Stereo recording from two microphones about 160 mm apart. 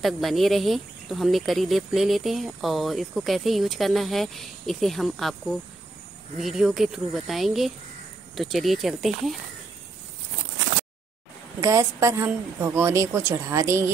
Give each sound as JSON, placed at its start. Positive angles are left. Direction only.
{"t": 0.0, "sound": "speech", "side_deg": 0}
{"t": 6.3, "sound": "speech", "side_deg": -5}
{"t": 11.6, "sound": "a woman's voice", "side_deg": -20}